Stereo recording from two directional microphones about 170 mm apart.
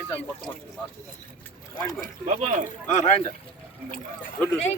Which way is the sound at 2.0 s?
50° right (ahead or behind).